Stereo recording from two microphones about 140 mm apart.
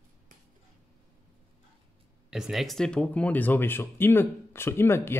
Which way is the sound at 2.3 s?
Centre (ahead or behind).